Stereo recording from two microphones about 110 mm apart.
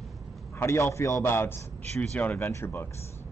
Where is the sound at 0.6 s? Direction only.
25° left (ahead or behind).